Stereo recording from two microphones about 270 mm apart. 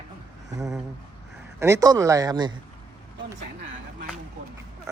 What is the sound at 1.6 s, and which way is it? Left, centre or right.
Speech, centre.